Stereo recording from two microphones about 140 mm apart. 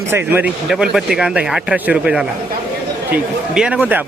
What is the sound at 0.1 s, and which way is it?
Speech, 15° right (ahead or behind).